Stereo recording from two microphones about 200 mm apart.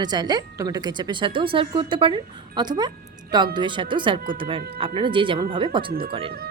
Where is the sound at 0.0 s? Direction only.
20° right (ahead or behind).